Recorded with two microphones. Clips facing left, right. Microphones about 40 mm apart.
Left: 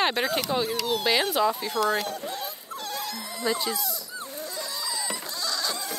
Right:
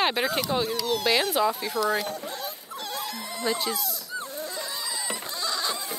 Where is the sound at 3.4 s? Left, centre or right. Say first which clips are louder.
Even; centre.